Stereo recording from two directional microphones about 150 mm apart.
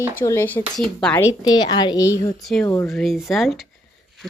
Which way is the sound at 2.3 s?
5° left (ahead or behind).